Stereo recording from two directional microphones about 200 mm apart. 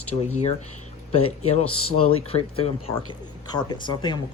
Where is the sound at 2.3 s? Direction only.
30° left (ahead or behind).